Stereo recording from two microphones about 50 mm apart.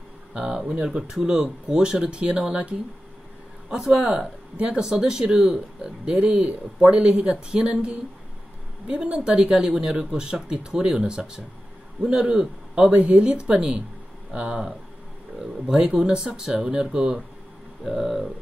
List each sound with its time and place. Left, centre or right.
0.5 s a man's voice: centre
12.9 s speech: right
15.3 s speech: centre
17.8 s speech: centre